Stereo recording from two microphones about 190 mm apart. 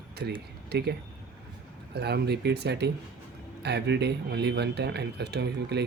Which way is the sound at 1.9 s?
60° right (ahead or behind).